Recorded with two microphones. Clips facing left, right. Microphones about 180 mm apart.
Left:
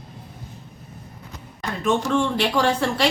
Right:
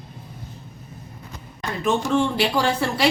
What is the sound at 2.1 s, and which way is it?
Speech, 10° right (ahead or behind).